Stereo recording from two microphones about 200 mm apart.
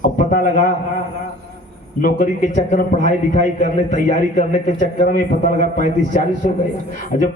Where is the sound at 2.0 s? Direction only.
40° left (ahead or behind).